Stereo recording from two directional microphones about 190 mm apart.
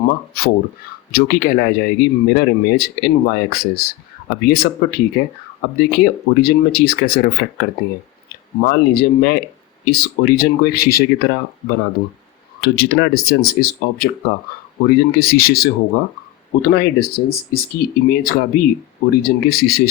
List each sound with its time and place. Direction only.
0.4 s speech: 50° left (ahead or behind)